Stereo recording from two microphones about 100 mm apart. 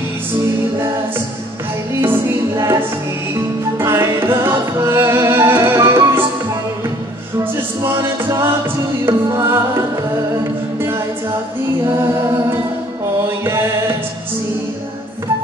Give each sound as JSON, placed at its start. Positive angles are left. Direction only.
{"t": 2.0, "sound": "music", "side_deg": -25}
{"t": 7.8, "sound": "music", "side_deg": -25}
{"t": 13.4, "sound": "music", "side_deg": -25}